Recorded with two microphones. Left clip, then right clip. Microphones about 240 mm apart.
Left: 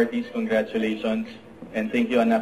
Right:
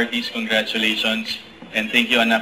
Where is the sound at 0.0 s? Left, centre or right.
Centre.